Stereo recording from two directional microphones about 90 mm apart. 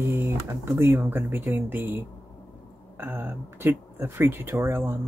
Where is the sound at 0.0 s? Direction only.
25° right (ahead or behind).